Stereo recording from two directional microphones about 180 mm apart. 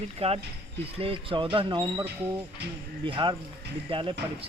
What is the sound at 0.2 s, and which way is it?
Speech, 35° right (ahead or behind).